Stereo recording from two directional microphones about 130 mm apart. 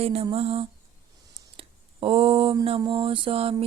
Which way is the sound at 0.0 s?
50° right (ahead or behind).